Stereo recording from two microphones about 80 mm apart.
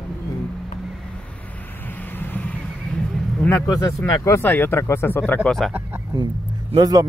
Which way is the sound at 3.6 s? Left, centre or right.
Left.